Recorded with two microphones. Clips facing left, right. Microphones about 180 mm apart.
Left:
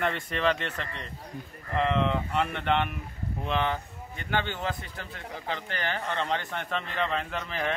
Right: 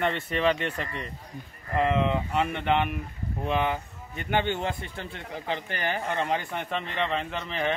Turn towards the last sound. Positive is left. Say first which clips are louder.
# right 2 dB
turn(degrees=0)  # may be behind; listen again after turning